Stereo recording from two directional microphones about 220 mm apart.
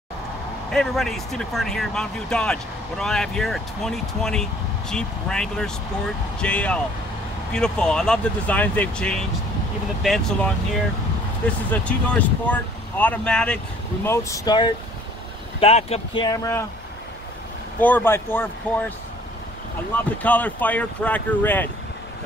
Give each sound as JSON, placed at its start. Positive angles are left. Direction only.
{"t": 0.7, "sound": "speech", "side_deg": 0}
{"t": 17.7, "sound": "speech", "side_deg": 10}
{"t": 20.2, "sound": "speech", "side_deg": 5}